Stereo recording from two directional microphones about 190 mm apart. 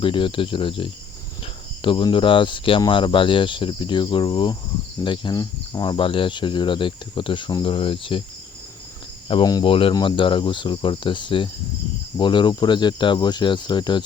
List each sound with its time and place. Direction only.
0.0 s speech: 25° left (ahead or behind)
9.3 s speech: 20° left (ahead or behind)